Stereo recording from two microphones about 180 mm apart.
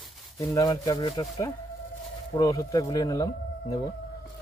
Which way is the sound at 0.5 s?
20° left (ahead or behind).